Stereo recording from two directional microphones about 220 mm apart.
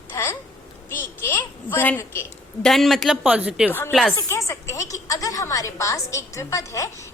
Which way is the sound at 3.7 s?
5° left (ahead or behind).